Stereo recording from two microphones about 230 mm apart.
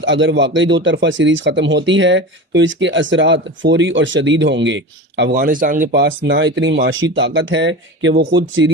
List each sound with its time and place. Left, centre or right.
0.0 s speech: right
5.3 s speech: right